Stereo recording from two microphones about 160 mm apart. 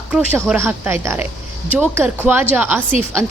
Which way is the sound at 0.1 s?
10° right (ahead or behind).